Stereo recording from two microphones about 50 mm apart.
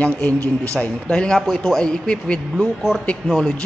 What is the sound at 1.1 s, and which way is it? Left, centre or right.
Speech, centre.